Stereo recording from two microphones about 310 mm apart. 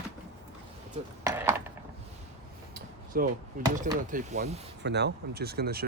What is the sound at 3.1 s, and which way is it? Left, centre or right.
Speech, right.